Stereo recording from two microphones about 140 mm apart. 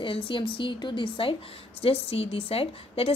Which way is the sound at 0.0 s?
40° left (ahead or behind).